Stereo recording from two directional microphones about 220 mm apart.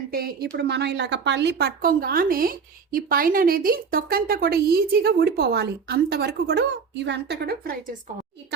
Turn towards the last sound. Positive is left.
turn(degrees=-40)  # may be behind; listen again after turning